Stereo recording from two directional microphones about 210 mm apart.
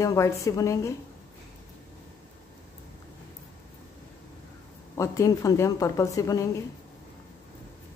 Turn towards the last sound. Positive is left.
turn(degrees=15)  # may be behind; listen again after turning